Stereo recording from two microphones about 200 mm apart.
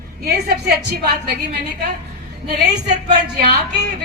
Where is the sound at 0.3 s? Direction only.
55° right (ahead or behind).